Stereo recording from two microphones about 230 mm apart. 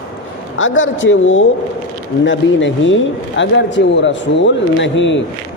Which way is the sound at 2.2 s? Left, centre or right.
Left.